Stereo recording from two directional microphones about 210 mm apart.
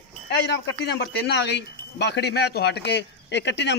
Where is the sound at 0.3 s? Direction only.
55° left (ahead or behind).